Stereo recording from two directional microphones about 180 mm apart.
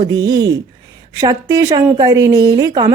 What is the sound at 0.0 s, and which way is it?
Speech, 20° right (ahead or behind).